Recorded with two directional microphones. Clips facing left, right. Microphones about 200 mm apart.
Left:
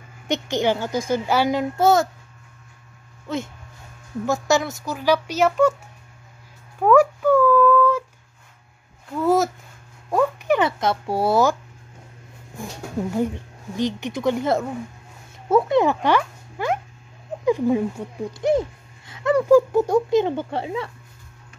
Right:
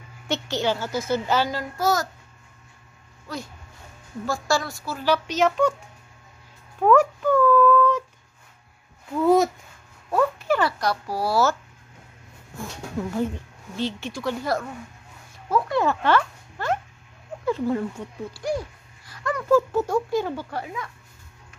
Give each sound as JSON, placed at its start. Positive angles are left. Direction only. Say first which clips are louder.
{"t": 0.3, "sound": "a child's voice", "louder": "left 4 dB", "side_deg": 15}
{"t": 3.3, "sound": "a child's voice", "louder": "left 7 dB", "side_deg": 25}
{"t": 6.8, "sound": "a sound", "louder": "left 2 dB", "side_deg": 5}
{"t": 9.1, "sound": "speech", "louder": "right 1 dB", "side_deg": 0}
{"t": 10.1, "sound": "a child's voice", "louder": "left 2 dB", "side_deg": 15}
{"t": 13.7, "sound": "a child's voice", "louder": "left 4 dB", "side_deg": 15}